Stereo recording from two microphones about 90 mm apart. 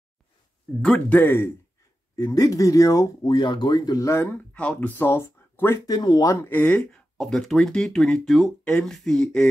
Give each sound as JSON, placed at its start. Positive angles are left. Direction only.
{"t": 0.8, "sound": "speech", "side_deg": 15}
{"t": 2.1, "sound": "speech", "side_deg": 40}
{"t": 3.3, "sound": "speech", "side_deg": 55}
{"t": 4.6, "sound": "speech", "side_deg": 15}
{"t": 5.9, "sound": "speech", "side_deg": 45}
{"t": 6.4, "sound": "speech", "side_deg": 20}
{"t": 6.9, "sound": "speech", "side_deg": 5}